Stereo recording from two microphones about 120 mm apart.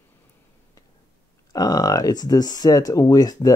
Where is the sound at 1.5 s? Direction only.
35° left (ahead or behind).